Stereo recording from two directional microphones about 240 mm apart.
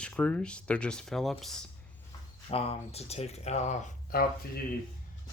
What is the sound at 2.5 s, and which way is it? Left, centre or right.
Speech, left.